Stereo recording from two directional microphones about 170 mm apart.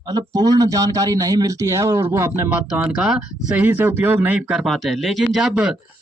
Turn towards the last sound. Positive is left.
turn(degrees=-5)  # may be behind; listen again after turning